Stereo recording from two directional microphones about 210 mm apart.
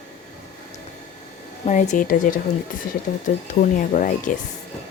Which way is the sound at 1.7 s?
35° left (ahead or behind).